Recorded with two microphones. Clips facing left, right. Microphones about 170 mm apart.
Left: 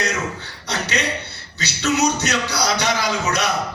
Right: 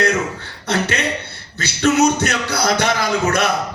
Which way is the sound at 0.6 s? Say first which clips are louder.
Right 4 dB; 50° right (ahead or behind).